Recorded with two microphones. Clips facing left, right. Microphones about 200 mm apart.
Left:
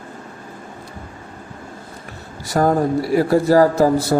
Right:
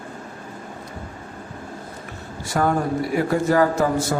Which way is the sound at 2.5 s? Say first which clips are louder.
Left 4 dB; 40° left (ahead or behind).